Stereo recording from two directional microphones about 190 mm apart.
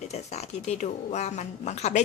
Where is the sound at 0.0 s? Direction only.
35° left (ahead or behind).